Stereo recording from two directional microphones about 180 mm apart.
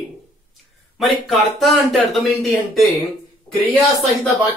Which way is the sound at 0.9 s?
Centre (ahead or behind).